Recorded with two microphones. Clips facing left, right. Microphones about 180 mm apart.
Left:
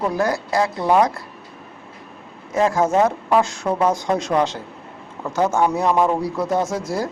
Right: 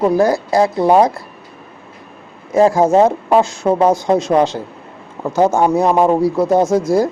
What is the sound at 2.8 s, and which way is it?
A man's voice, 30° right (ahead or behind).